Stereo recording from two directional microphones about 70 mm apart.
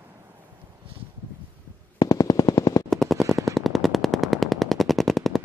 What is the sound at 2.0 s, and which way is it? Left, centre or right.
Machine gun, left.